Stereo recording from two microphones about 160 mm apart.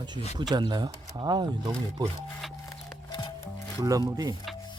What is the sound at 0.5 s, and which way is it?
Speech, 25° right (ahead or behind).